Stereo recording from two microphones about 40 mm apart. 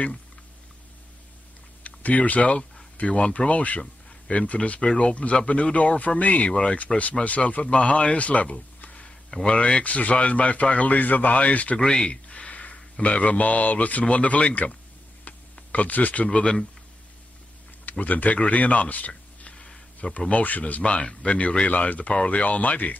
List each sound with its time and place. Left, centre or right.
1.8 s a man's voice: left
6.5 s a man's voice: left
11.7 s speech: centre
12.1 s a sound: left
13.0 s a man's voice: left
15.7 s a man's voice: left
18.0 s speech: left
19.5 s a sound: centre
20.2 s a man's voice: left
20.9 s a man's voice: left